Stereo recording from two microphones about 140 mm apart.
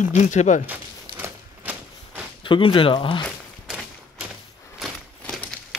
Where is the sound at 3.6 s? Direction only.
5° right (ahead or behind).